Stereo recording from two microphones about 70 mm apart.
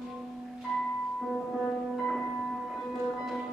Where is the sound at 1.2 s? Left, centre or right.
Centre.